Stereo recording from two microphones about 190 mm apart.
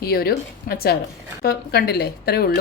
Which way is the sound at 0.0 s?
55° left (ahead or behind).